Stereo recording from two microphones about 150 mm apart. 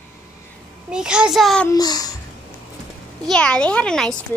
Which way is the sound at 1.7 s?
25° left (ahead or behind).